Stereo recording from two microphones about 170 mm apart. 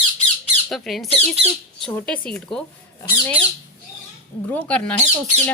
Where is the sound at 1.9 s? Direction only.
10° left (ahead or behind).